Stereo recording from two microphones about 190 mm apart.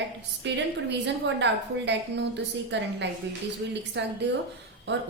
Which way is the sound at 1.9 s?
65° right (ahead or behind).